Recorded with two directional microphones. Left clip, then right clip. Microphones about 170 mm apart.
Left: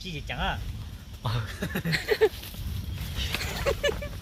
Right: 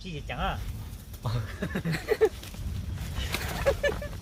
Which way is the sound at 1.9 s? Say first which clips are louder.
Left 2 dB; 35° right (ahead or behind).